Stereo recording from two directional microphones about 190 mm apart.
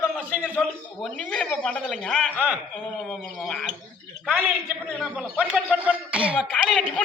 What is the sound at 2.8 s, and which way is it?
Speech, 5° left (ahead or behind).